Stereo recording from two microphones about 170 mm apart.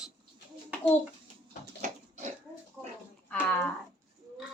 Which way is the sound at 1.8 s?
45° right (ahead or behind).